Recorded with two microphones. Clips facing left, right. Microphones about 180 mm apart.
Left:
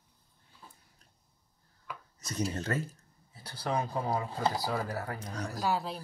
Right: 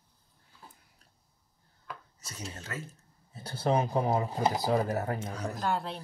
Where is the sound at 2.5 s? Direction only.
45° left (ahead or behind).